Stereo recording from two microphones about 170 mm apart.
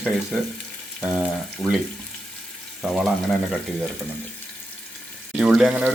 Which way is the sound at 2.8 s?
Centre (ahead or behind).